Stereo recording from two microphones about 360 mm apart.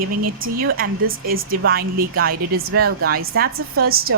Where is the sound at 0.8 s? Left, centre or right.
Right.